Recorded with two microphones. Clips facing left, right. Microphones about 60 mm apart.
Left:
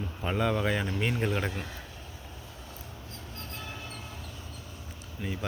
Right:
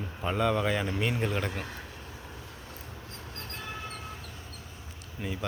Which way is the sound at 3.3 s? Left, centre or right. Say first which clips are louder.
Even; right.